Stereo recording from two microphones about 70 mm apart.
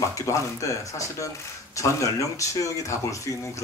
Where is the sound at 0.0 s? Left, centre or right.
Left.